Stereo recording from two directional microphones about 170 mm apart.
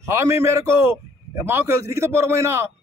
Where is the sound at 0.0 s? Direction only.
15° right (ahead or behind).